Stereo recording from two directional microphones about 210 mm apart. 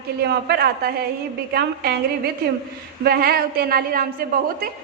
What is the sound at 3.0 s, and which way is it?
A woman's voice, 45° right (ahead or behind).